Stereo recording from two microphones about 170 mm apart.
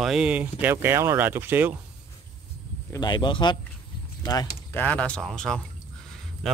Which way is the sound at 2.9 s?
25° left (ahead or behind).